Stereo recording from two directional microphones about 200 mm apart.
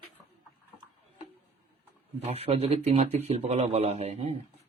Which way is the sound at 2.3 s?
30° right (ahead or behind).